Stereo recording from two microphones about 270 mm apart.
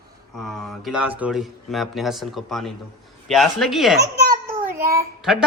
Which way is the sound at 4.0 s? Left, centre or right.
Right.